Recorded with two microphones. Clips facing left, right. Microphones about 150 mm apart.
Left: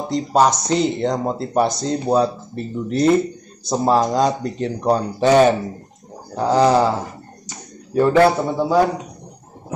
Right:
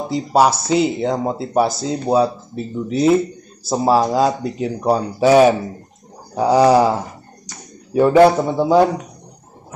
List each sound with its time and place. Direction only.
0.1 s speech: 5° right (ahead or behind)
7.9 s speech: 10° right (ahead or behind)